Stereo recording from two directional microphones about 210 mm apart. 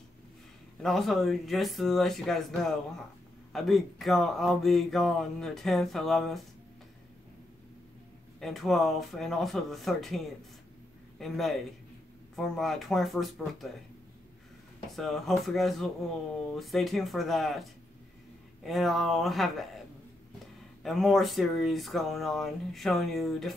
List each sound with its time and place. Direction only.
0.7 s speech: centre (ahead or behind)
8.4 s speech: centre (ahead or behind)
14.9 s speech: centre (ahead or behind)
20.8 s speech: centre (ahead or behind)